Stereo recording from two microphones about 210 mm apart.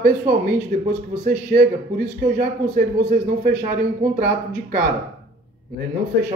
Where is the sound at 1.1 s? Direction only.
35° right (ahead or behind).